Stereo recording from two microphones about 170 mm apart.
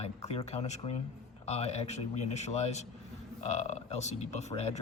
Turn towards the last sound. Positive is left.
turn(degrees=40)  # may be behind; listen again after turning